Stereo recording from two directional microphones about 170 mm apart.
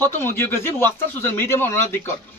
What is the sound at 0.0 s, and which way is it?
Speech, 15° left (ahead or behind).